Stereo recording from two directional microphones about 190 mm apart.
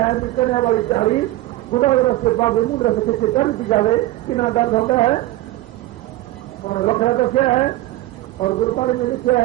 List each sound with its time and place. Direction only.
0.0 s a man's voice: 30° left (ahead or behind)
6.7 s a man's voice: 35° left (ahead or behind)